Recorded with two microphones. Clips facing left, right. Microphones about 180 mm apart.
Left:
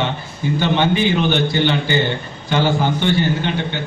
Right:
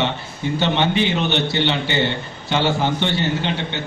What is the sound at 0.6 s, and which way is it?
A man's voice, 25° right (ahead or behind).